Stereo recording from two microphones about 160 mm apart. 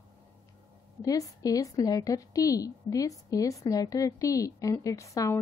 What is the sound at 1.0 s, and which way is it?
A woman's voice, 20° left (ahead or behind).